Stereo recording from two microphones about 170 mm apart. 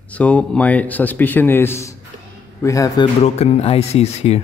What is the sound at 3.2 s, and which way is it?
Speech, 35° left (ahead or behind).